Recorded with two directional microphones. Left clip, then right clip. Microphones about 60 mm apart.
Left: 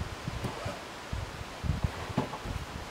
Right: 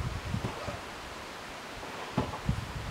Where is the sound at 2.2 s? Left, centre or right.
Left.